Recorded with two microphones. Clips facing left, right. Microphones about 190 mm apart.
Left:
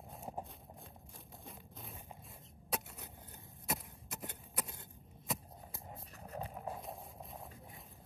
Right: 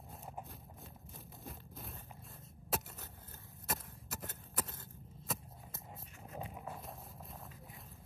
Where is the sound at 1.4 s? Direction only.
Centre (ahead or behind).